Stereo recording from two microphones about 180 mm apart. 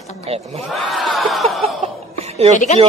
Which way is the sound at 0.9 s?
Centre (ahead or behind).